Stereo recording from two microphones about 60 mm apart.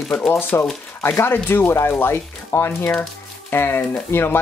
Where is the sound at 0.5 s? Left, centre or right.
Left.